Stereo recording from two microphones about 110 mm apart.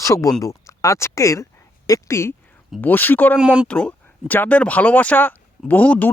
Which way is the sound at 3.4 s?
10° right (ahead or behind).